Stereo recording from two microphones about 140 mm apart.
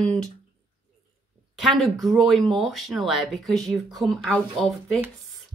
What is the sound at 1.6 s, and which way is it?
A woman's voice, centre (ahead or behind).